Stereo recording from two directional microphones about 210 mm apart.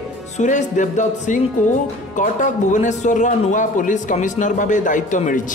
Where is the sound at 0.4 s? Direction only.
35° left (ahead or behind).